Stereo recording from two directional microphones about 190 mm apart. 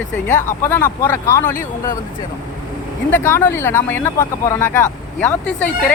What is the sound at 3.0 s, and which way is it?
Speech, 10° left (ahead or behind).